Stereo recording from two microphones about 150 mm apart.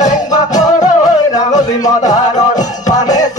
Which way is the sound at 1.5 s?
25° left (ahead or behind).